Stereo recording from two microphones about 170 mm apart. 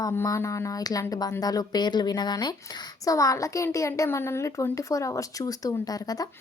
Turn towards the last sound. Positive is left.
turn(degrees=20)  # may be behind; listen again after turning